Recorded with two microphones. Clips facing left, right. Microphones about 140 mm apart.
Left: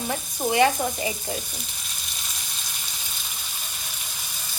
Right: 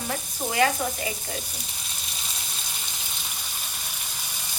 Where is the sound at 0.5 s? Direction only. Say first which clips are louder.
Left 3 dB; 25° left (ahead or behind).